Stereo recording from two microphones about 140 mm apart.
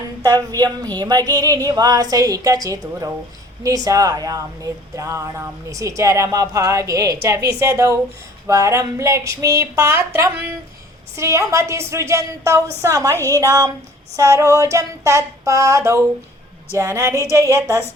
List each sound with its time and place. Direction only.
0.2 s speech: 25° right (ahead or behind)